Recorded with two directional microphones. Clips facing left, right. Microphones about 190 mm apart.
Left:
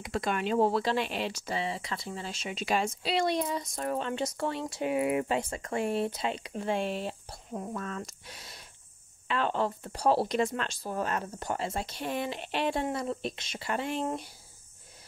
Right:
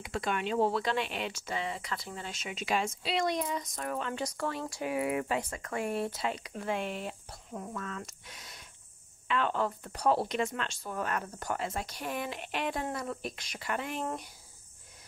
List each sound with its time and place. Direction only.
0.0 s speech: 40° left (ahead or behind)